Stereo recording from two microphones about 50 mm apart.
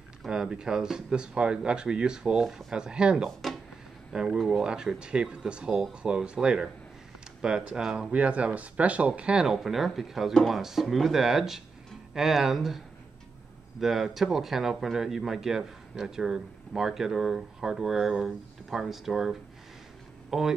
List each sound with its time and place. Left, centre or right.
0.3 s speech: centre
8.1 s speech: right
9.5 s speech: centre